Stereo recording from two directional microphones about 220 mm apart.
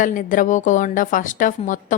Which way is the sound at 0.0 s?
35° left (ahead or behind).